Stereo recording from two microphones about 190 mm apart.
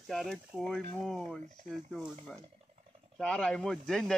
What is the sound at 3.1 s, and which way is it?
Speech, 5° left (ahead or behind).